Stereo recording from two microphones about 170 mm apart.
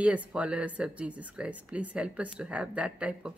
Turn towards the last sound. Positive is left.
turn(degrees=-5)  # may be behind; listen again after turning